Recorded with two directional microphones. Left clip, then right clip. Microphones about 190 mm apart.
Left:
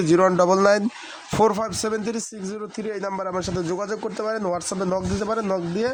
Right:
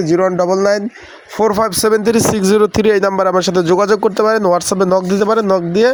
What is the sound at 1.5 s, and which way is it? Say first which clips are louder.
Speech: right 12 dB; 40° right (ahead or behind).